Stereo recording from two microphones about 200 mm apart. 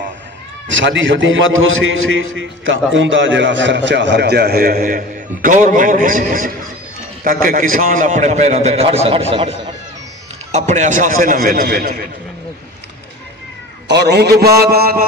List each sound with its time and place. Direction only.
0.7 s a man's voice: 70° right (ahead or behind); by 12.0 s 45° right (ahead or behind)
13.8 s a man's voice: 55° right (ahead or behind)
14.4 s a sound: 50° right (ahead or behind)